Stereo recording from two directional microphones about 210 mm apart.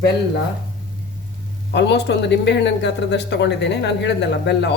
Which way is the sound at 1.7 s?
55° left (ahead or behind).